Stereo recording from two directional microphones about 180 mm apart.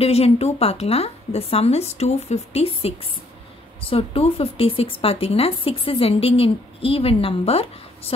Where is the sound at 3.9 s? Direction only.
30° left (ahead or behind).